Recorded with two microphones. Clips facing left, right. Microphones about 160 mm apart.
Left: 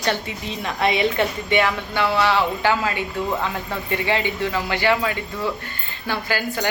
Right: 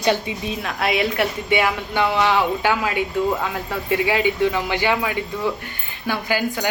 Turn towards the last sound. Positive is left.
turn(degrees=-15)  # may be behind; listen again after turning